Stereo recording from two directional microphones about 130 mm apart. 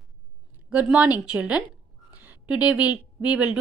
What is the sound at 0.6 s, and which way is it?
Speech, 10° right (ahead or behind).